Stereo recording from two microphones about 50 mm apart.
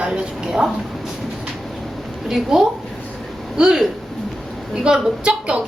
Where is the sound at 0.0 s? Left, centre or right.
Centre.